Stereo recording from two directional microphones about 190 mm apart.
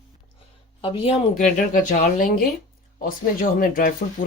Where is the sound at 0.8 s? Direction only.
30° left (ahead or behind).